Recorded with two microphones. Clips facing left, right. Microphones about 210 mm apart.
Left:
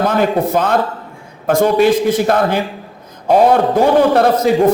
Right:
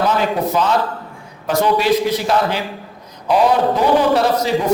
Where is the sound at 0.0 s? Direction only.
50° left (ahead or behind).